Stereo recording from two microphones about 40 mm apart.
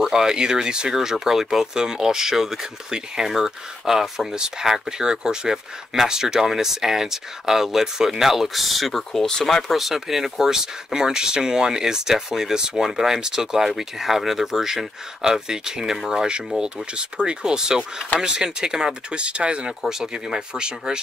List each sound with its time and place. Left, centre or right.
0.0 s speech: centre
9.8 s speech: centre; by 19.7 s right
19.9 s speech: centre